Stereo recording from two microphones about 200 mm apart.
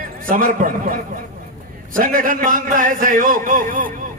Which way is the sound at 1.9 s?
45° right (ahead or behind).